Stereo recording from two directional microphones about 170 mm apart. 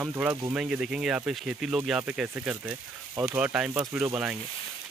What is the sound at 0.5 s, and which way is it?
Speech, 5° right (ahead or behind).